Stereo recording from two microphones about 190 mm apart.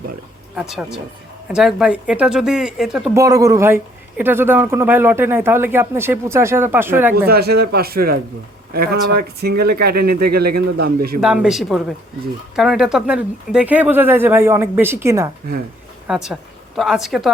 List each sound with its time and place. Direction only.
0.5 s speech: 5° right (ahead or behind)
3.2 s speech: 20° right (ahead or behind)
7.3 s speech: 55° right (ahead or behind)
11.2 s speech: 5° right (ahead or behind)
16.0 s a woman's voice: 5° right (ahead or behind)